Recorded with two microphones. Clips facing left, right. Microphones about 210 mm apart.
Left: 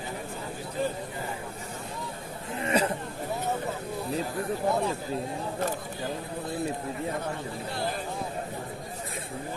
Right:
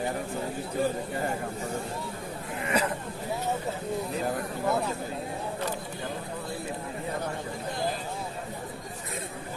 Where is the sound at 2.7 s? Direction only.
30° left (ahead or behind).